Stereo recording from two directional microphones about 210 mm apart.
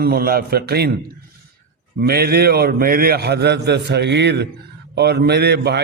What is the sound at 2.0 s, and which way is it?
A man's voice, 50° right (ahead or behind).